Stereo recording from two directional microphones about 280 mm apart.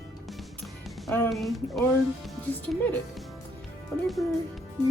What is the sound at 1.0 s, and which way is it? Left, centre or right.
Speech, centre.